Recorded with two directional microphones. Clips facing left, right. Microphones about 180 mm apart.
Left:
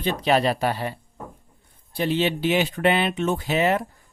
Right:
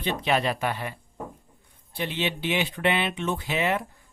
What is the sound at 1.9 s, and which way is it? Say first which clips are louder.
Speech: left 7 dB; 40° left (ahead or behind).